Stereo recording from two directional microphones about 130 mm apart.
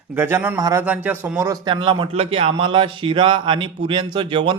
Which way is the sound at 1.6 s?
40° right (ahead or behind).